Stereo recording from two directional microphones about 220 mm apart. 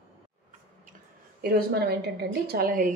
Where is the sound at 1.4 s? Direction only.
45° right (ahead or behind).